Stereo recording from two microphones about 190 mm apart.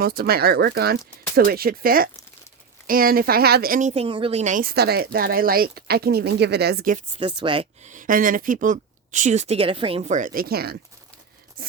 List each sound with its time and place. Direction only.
0.0 s speech: 55° right (ahead or behind)
7.2 s speech: 25° right (ahead or behind); by 10.8 s 55° right (ahead or behind)
11.6 s a sound: 50° right (ahead or behind)